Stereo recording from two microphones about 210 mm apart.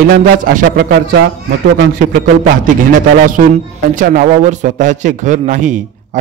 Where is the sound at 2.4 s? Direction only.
40° right (ahead or behind).